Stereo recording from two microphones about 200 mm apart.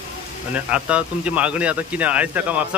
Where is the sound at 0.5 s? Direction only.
5° right (ahead or behind).